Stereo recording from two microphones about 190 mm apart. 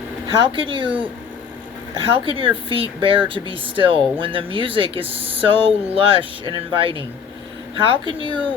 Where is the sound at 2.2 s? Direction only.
30° right (ahead or behind).